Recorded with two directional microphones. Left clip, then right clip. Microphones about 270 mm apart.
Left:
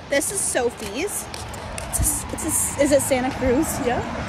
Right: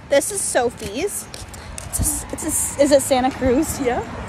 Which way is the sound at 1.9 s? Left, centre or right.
Centre.